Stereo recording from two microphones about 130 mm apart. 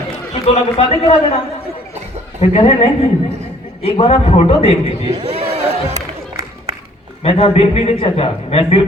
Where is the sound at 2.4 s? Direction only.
50° left (ahead or behind).